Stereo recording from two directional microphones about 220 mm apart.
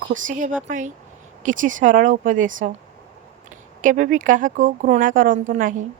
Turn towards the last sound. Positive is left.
turn(degrees=-35)  # may be behind; listen again after turning